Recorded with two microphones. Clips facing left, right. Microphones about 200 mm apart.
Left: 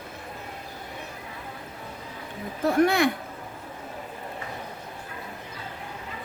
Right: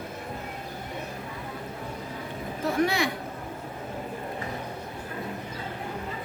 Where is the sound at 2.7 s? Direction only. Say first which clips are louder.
Left 5 dB; 50° left (ahead or behind).